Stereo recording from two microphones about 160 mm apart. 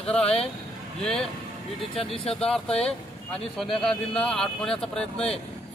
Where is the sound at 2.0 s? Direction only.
35° left (ahead or behind).